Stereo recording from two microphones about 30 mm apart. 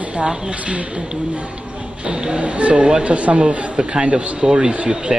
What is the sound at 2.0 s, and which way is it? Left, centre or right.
Speech, right.